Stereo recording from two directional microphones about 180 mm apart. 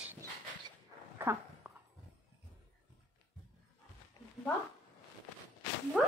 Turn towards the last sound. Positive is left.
turn(degrees=0)  # may be behind; listen again after turning